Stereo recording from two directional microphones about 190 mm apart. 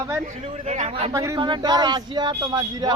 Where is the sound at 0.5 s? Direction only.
35° right (ahead or behind).